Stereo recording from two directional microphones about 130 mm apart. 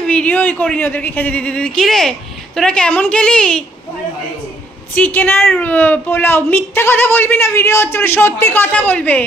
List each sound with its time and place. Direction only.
0.0 s a woman's voice: 10° left (ahead or behind)
4.9 s a woman's voice: 15° left (ahead or behind)